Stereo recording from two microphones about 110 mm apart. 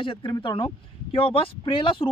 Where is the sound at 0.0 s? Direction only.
50° left (ahead or behind).